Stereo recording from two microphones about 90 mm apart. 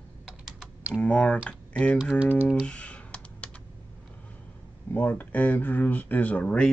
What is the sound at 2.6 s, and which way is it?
Computer keyboard, 15° left (ahead or behind).